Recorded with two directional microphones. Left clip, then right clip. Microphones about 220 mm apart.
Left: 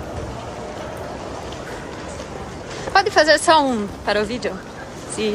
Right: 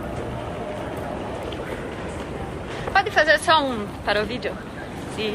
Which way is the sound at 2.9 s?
40° left (ahead or behind).